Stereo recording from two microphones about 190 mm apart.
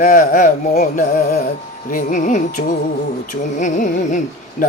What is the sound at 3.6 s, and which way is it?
Carnatic music, 40° left (ahead or behind).